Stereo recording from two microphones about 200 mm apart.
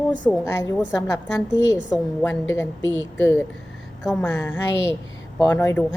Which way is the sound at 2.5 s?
15° left (ahead or behind).